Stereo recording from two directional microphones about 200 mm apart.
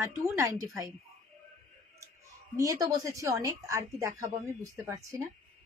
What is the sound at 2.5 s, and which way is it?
Speech, 15° right (ahead or behind).